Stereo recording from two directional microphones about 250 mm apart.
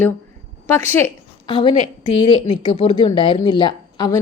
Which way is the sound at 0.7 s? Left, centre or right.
Centre.